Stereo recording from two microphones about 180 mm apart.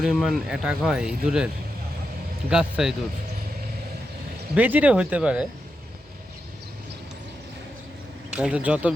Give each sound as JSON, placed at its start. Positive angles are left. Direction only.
{"t": 0.0, "sound": "speech", "side_deg": 0}
{"t": 2.5, "sound": "speech", "side_deg": -5}
{"t": 4.5, "sound": "speech", "side_deg": -10}
{"t": 8.4, "sound": "speech", "side_deg": -5}